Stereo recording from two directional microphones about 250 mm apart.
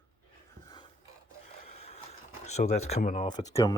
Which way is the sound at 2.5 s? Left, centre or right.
Left.